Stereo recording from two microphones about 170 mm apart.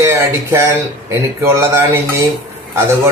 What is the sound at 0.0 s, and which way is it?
A man's voice, 15° right (ahead or behind).